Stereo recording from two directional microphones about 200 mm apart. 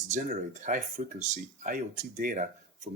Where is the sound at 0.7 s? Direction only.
40° right (ahead or behind).